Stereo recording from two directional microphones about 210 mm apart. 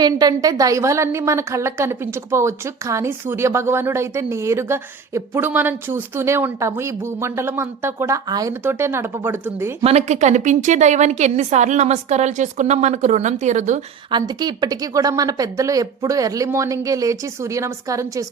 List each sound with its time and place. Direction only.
0.0 s a woman's voice: 20° right (ahead or behind)
9.8 s a woman's voice: 30° right (ahead or behind)
14.1 s a woman's voice: 20° right (ahead or behind)